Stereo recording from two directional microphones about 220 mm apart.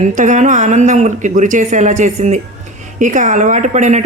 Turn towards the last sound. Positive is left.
turn(degrees=-30)  # may be behind; listen again after turning